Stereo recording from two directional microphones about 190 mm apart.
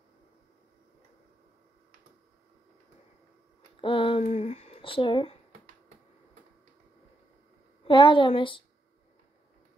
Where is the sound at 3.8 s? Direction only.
25° left (ahead or behind).